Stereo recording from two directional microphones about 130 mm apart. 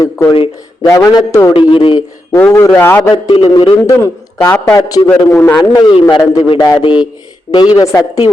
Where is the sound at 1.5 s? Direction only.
40° left (ahead or behind).